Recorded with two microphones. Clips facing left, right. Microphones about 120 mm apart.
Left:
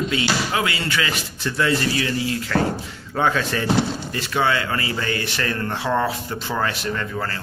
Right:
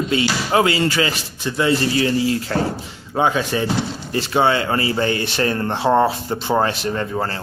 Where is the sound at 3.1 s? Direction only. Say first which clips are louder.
Right 3 dB; 15° right (ahead or behind).